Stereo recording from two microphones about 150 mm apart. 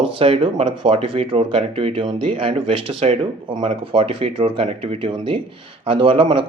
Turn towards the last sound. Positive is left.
turn(degrees=-35)  # may be behind; listen again after turning